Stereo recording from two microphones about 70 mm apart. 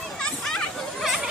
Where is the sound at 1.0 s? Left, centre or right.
Centre.